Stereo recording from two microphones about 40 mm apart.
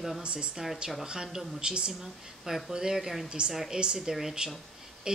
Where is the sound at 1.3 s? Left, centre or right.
Right.